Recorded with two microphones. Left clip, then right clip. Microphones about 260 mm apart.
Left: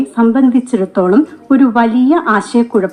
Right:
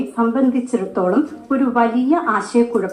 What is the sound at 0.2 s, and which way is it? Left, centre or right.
A woman's voice, left.